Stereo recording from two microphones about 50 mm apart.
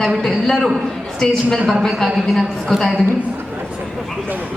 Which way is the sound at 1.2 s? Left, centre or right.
Centre.